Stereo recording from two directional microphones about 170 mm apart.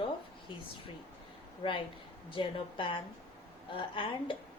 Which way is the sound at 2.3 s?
30° left (ahead or behind).